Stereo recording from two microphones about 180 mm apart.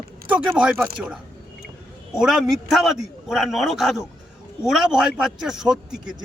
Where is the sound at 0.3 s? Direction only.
5° right (ahead or behind).